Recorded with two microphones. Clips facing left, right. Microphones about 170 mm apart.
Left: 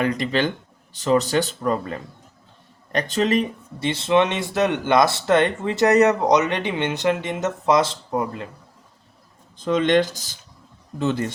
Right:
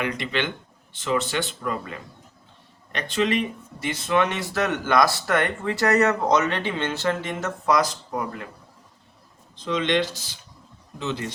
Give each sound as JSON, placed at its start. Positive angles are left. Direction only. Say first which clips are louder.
{"t": 0.0, "sound": "speech", "louder": "left 5 dB", "side_deg": 40}
{"t": 3.8, "sound": "speech", "louder": "left 4 dB", "side_deg": 25}
{"t": 9.6, "sound": "speech", "louder": "left 5 dB", "side_deg": 50}